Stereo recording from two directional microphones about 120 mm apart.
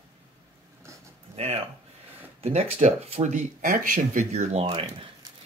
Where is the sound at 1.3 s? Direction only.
60° right (ahead or behind).